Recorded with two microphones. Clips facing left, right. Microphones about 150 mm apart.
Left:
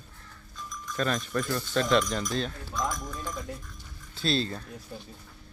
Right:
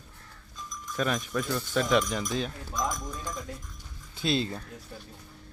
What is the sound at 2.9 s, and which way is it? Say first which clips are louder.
Speech: even; 15° right (ahead or behind).